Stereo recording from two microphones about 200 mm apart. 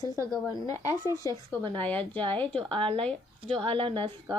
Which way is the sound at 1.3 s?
20° right (ahead or behind).